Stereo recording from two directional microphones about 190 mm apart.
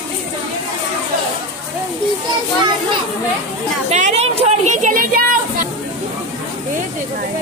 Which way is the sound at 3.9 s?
40° right (ahead or behind).